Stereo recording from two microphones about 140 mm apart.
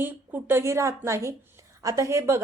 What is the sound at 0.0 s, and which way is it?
A woman's voice, 15° right (ahead or behind).